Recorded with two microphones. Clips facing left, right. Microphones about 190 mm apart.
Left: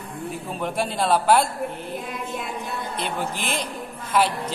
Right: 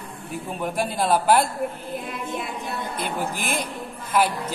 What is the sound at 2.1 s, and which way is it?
Speech, centre (ahead or behind).